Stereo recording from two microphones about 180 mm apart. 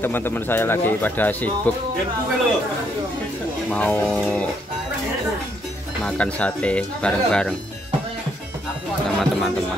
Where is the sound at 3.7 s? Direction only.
10° left (ahead or behind).